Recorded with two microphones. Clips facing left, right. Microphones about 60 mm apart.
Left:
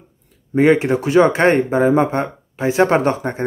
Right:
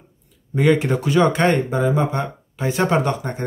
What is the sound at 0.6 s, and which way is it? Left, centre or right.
Speech, left.